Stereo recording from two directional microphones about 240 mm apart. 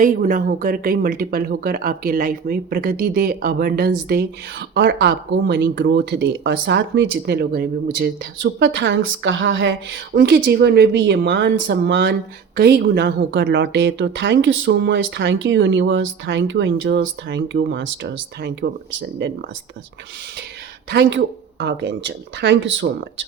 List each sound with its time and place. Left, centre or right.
0.0 s speech: right
20.9 s speech: right